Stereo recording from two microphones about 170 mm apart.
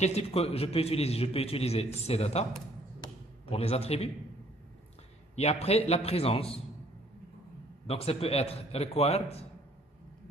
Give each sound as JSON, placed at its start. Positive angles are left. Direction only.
{"t": 0.0, "sound": "a man's voice", "side_deg": 35}
{"t": 3.0, "sound": "a sound", "side_deg": 35}
{"t": 5.3, "sound": "a man's voice", "side_deg": 40}
{"t": 7.8, "sound": "a man's voice", "side_deg": 35}